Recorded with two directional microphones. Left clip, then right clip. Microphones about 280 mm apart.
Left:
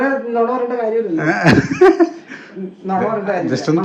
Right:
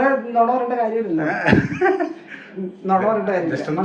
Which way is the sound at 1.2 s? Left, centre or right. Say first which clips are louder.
Left 5 dB; left.